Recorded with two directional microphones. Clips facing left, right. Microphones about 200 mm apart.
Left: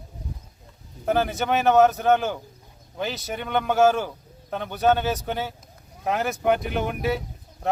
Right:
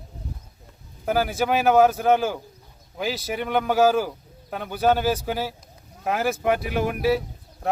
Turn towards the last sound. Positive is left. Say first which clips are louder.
# right 2 dB
turn(degrees=0)  # may be behind; listen again after turning